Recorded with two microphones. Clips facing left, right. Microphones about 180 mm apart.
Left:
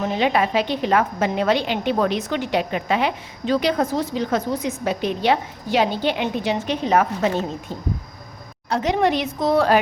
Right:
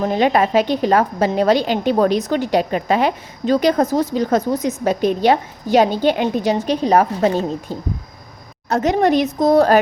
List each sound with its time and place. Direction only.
0.0 s a woman's voice: 45° right (ahead or behind)